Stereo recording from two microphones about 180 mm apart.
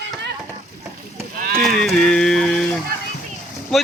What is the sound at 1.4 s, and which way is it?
Clip-clop, 50° right (ahead or behind).